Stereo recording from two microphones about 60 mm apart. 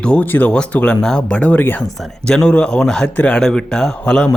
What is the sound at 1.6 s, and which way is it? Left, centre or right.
Speech, left.